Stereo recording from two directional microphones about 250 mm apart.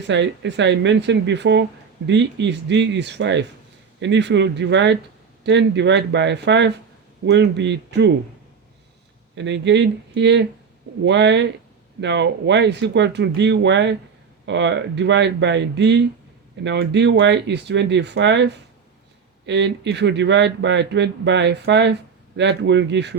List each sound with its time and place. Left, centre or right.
0.0 s speech: right
9.3 s speech: right